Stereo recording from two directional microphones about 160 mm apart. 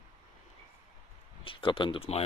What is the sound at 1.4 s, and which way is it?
Speech, 35° left (ahead or behind).